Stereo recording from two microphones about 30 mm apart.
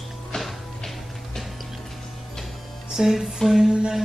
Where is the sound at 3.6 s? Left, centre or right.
Right.